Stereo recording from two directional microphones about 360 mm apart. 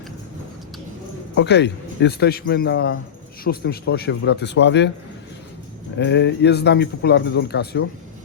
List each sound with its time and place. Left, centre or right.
1.4 s a man's voice: left
6.0 s a man's voice: left